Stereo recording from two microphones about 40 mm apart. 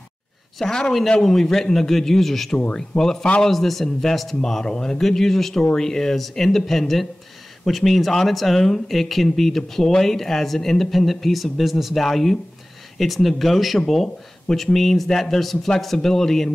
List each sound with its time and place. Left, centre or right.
0.6 s speech: centre
2.5 s speech: left
3.0 s speech: centre
4.6 s speech: centre